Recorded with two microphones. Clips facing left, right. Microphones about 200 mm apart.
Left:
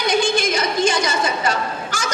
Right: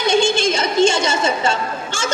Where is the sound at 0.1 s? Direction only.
25° right (ahead or behind).